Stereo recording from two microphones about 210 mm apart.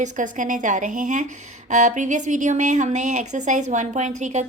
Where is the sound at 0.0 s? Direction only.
35° right (ahead or behind).